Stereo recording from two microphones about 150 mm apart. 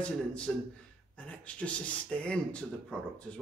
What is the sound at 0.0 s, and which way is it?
Speech, 5° left (ahead or behind).